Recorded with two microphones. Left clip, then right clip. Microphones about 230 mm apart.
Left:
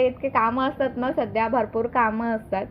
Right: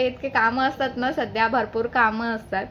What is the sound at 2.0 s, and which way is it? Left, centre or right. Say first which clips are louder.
Speech: right 2 dB; centre.